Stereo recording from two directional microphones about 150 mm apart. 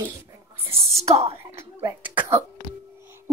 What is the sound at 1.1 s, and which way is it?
Speech, 45° right (ahead or behind).